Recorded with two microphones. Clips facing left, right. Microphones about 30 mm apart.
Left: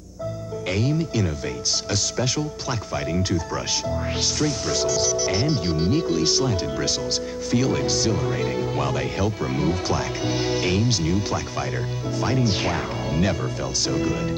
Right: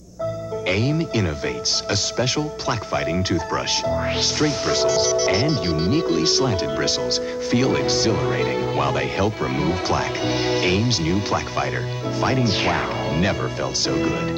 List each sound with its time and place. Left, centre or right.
0.7 s speech: right